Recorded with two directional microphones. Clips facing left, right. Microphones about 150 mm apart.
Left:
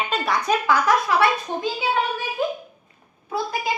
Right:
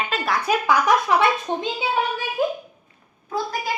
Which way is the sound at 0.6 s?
15° right (ahead or behind).